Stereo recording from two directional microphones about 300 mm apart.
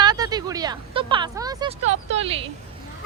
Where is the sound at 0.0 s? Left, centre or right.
Centre.